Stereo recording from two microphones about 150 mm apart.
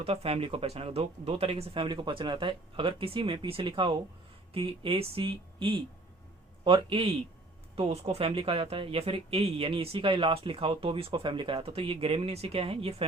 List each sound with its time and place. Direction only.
0.0 s speech: 40° right (ahead or behind)